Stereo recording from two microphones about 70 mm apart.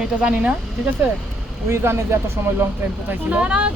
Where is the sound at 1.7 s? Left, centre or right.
Right; by 3.7 s centre.